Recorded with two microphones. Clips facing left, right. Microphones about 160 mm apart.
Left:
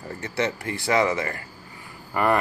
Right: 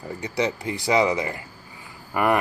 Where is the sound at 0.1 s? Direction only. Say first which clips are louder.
Right 1 dB; 15° right (ahead or behind).